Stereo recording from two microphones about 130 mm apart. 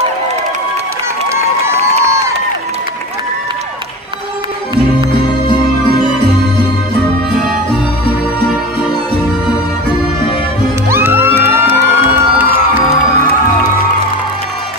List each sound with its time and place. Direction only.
2.0 s run: 20° right (ahead or behind)
10.9 s music: 15° right (ahead or behind)